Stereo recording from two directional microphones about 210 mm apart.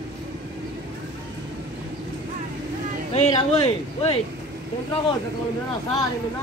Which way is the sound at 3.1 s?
30° left (ahead or behind).